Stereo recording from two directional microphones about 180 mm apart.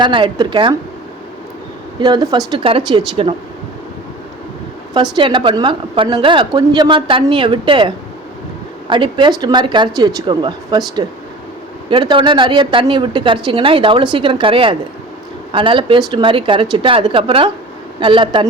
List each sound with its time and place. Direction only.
0.0 s a woman's voice: 25° right (ahead or behind)
2.0 s a woman's voice: 20° right (ahead or behind)
4.9 s a woman's voice: 25° right (ahead or behind)